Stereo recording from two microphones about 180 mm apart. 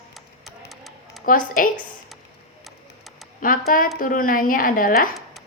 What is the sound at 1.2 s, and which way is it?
Speech, 50° left (ahead or behind).